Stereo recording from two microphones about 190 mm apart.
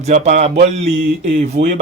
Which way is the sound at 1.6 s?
65° right (ahead or behind).